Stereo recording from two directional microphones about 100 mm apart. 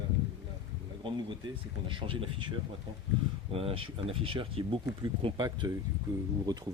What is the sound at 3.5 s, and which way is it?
Speech, 70° right (ahead or behind).